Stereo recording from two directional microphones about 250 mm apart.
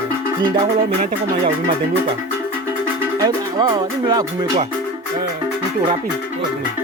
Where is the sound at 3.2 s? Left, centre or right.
Centre.